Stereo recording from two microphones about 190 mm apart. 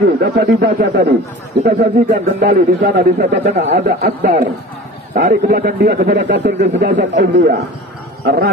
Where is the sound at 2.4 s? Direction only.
50° right (ahead or behind).